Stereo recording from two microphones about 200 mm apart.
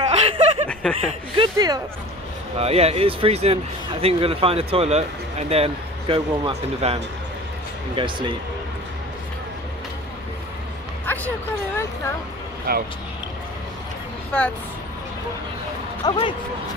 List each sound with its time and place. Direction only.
0.1 s chuckle: 30° right (ahead or behind)
0.7 s chuckle: 5° left (ahead or behind)
1.3 s speech: 20° right (ahead or behind)
11.1 s speech: 10° left (ahead or behind)
16.1 s speech: 25° left (ahead or behind)